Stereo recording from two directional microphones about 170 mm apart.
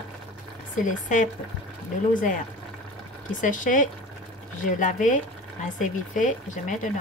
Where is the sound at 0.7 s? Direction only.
50° left (ahead or behind).